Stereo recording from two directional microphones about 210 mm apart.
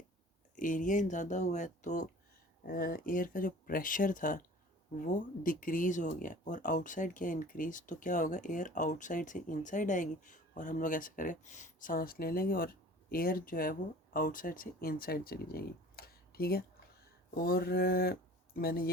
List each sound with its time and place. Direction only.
0.5 s speech: 40° left (ahead or behind)